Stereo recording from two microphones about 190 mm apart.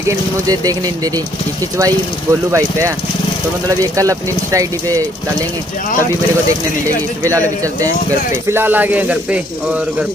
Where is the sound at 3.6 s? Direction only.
15° right (ahead or behind).